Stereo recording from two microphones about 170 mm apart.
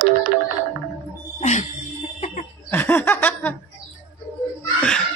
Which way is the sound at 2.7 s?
15° left (ahead or behind).